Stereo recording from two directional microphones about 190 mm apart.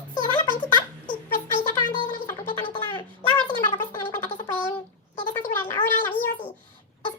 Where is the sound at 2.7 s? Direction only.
25° left (ahead or behind).